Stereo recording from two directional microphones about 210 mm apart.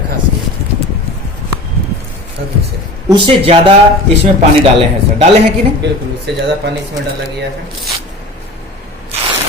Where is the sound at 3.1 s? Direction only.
25° right (ahead or behind).